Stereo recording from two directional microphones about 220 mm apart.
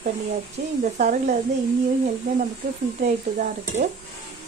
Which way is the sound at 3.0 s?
30° right (ahead or behind).